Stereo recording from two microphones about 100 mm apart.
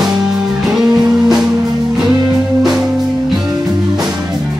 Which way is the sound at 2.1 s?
40° right (ahead or behind).